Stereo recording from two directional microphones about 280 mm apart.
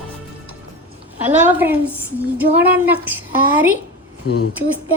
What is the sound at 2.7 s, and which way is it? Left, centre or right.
Speech, centre.